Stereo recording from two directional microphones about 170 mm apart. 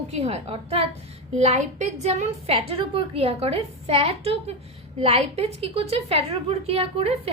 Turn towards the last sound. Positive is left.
turn(degrees=-35)  # may be behind; listen again after turning